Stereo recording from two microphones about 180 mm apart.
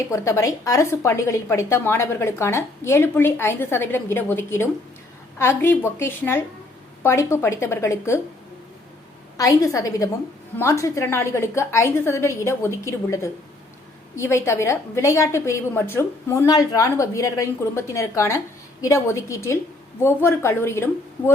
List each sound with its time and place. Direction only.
0.1 s a woman's voice: 15° left (ahead or behind)
9.4 s a woman's voice: 20° left (ahead or behind)